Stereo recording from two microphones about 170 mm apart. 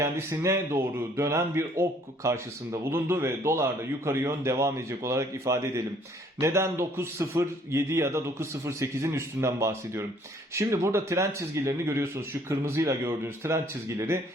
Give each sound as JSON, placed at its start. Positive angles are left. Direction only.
{"t": 0.0, "sound": "speech", "side_deg": -15}